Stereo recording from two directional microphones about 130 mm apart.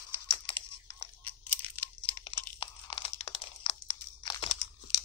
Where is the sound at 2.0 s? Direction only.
45° left (ahead or behind).